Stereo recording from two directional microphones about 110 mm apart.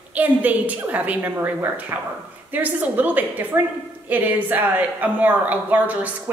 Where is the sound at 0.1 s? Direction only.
15° right (ahead or behind).